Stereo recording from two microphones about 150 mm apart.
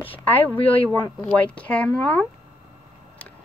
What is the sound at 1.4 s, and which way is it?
Speech, 10° left (ahead or behind).